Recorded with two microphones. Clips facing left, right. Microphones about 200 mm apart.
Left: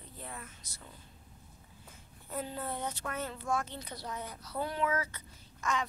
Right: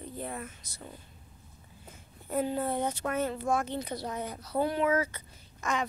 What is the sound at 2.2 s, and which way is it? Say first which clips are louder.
A woman's voice: right 8 dB; 60° right (ahead or behind).